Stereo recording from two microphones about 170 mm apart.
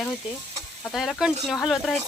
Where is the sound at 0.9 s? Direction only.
Centre (ahead or behind).